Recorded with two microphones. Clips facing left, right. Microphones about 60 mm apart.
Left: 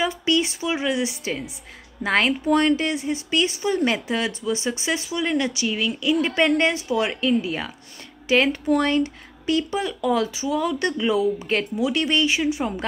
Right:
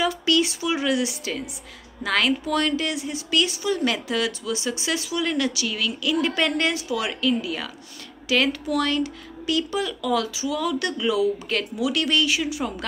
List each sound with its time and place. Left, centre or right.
0.0 s speech: left